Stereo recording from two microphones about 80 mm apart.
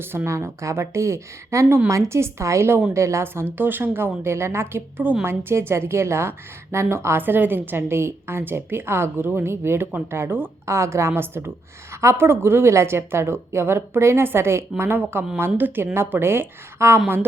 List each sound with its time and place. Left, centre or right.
0.3 s a woman's voice: right
3.4 s a woman's voice: right